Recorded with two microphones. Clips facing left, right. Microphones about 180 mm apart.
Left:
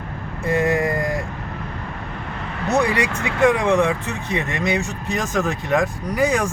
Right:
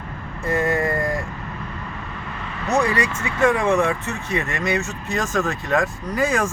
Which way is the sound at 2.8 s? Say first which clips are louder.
Left 1 dB; 15° left (ahead or behind).